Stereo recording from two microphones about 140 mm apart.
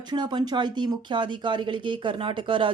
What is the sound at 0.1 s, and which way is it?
Speech, 35° right (ahead or behind).